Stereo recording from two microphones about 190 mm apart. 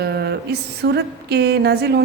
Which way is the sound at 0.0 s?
60° right (ahead or behind).